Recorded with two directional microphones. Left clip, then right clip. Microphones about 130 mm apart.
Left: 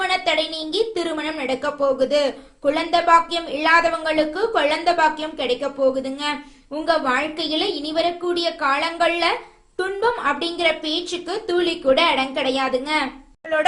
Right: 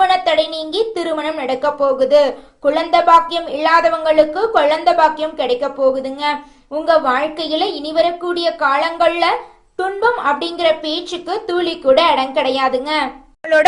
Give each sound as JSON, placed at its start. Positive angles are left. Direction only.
{"t": 0.0, "sound": "a woman's voice", "side_deg": 0}